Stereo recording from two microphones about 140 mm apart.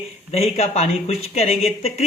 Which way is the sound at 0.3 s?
50° left (ahead or behind).